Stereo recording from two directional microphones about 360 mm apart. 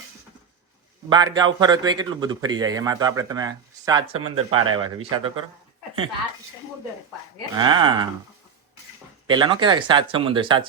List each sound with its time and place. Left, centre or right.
1.1 s a man's voice: centre
4.0 s speech: right
4.8 s a man's voice: centre
7.6 s a man's voice: centre
9.2 s a man's voice: centre